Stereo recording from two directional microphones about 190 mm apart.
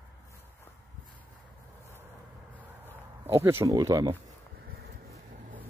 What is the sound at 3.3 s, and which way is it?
Speech, 15° right (ahead or behind).